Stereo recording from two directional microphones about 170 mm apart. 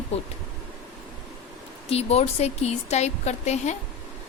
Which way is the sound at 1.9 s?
35° left (ahead or behind).